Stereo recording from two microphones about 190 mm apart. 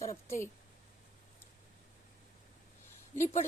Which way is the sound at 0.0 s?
15° left (ahead or behind).